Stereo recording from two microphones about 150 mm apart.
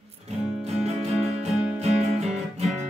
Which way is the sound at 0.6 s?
45° right (ahead or behind).